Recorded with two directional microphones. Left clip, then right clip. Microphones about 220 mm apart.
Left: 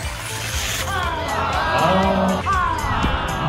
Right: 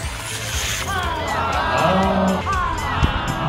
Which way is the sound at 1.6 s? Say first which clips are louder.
Left 1 dB; 50° left (ahead or behind).